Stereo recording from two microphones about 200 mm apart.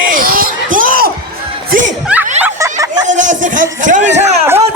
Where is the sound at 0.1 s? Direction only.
45° right (ahead or behind).